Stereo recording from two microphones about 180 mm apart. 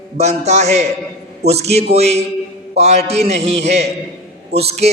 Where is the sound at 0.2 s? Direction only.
40° right (ahead or behind).